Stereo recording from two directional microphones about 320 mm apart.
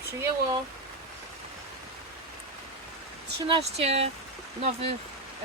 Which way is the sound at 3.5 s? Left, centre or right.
Centre.